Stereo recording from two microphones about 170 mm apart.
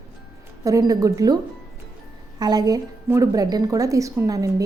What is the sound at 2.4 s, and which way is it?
A woman's voice, 25° right (ahead or behind).